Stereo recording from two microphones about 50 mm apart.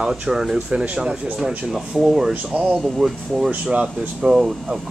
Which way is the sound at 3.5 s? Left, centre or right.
Right.